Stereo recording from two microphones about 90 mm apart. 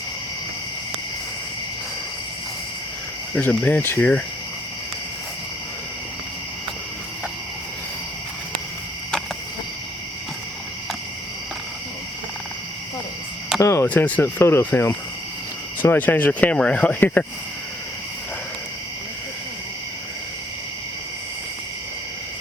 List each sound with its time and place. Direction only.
3.4 s speech: 20° left (ahead or behind)
13.6 s a sound: 35° left (ahead or behind)
13.8 s speech: 15° left (ahead or behind)